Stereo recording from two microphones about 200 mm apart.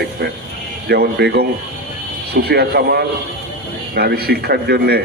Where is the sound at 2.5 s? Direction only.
50° right (ahead or behind).